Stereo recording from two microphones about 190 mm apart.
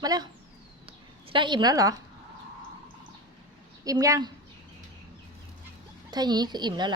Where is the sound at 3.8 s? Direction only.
20° right (ahead or behind).